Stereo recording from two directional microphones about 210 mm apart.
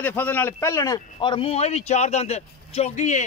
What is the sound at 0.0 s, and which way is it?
A man's voice, 10° left (ahead or behind).